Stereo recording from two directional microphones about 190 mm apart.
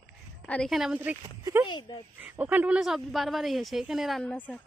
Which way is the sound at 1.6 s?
25° left (ahead or behind).